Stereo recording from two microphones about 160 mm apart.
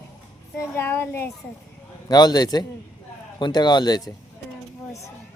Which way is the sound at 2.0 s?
25° left (ahead or behind).